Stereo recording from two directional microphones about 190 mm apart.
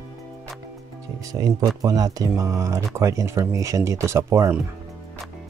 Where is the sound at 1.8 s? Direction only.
20° right (ahead or behind).